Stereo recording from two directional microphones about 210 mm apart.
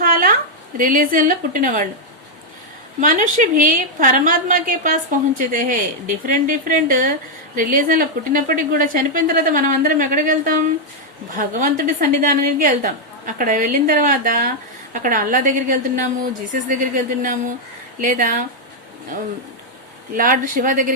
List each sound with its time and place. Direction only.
0.0 s a sound: 45° right (ahead or behind)
0.8 s a woman's voice: 40° right (ahead or behind)
3.0 s a woman's voice: 40° right (ahead or behind)
20.1 s a woman's voice: 40° right (ahead or behind)